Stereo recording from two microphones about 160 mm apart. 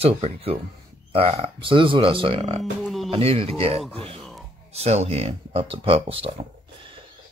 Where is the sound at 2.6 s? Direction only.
Centre (ahead or behind).